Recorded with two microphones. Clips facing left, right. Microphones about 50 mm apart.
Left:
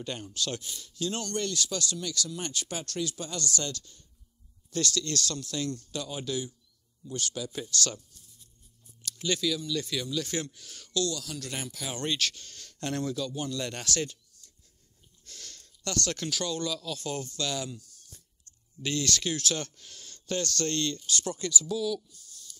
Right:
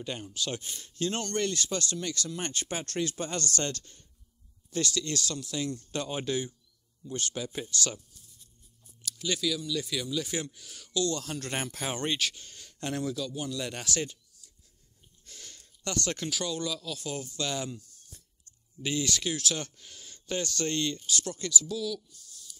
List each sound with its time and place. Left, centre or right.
0.0 s speech: centre
0.6 s speech: right
4.6 s speech: centre
5.9 s speech: right
7.7 s speech: centre
9.0 s speech: centre
11.1 s speech: right
12.0 s speech: centre
13.1 s speech: centre
17.4 s speech: right
21.1 s speech: centre